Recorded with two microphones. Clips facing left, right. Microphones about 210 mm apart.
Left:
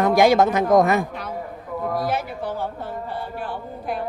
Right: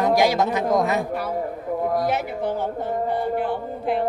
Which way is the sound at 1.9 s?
20° right (ahead or behind).